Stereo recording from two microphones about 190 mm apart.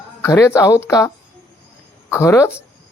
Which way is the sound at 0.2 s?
15° left (ahead or behind).